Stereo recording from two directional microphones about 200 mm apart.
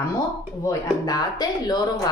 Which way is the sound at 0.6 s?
20° left (ahead or behind).